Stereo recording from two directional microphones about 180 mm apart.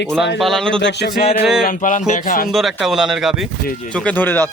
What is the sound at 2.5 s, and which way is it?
Speech, centre (ahead or behind).